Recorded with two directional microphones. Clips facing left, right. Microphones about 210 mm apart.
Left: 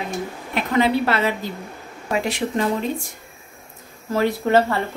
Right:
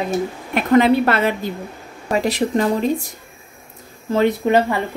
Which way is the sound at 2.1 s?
40° right (ahead or behind).